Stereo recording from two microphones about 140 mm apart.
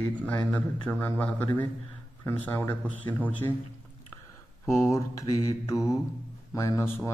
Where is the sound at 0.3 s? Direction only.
10° left (ahead or behind).